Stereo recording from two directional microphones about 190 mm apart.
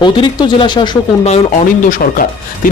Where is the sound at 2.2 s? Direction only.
45° left (ahead or behind).